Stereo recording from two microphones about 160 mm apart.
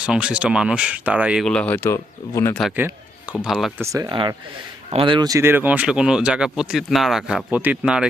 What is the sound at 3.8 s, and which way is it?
Speech, 20° right (ahead or behind).